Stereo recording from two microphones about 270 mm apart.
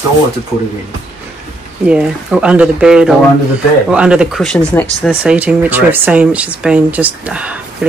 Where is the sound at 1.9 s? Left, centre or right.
Centre.